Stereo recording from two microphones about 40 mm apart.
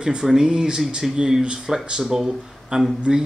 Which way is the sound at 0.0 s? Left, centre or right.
Centre.